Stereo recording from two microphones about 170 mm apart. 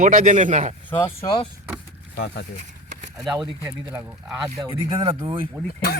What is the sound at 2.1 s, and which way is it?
Speech, 80° left.